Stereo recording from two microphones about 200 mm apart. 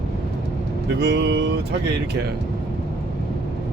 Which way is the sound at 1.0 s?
60° right (ahead or behind).